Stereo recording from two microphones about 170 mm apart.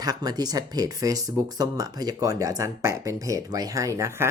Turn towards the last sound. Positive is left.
turn(degrees=-20)  # may be behind; listen again after turning